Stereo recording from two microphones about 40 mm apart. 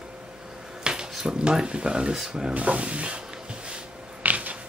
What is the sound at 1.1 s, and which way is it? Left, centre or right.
Speech, centre.